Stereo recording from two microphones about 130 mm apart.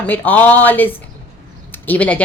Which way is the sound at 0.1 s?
15° left (ahead or behind).